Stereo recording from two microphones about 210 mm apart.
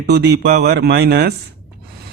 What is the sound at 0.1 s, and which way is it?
Speech, 50° right (ahead or behind).